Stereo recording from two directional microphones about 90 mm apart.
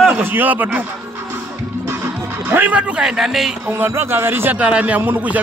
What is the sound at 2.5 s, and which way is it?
A man's voice, 20° right (ahead or behind).